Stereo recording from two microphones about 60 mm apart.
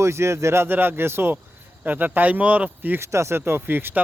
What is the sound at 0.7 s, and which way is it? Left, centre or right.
Speech, right.